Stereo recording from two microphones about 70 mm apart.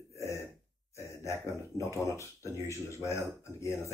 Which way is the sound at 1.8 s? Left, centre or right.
Left.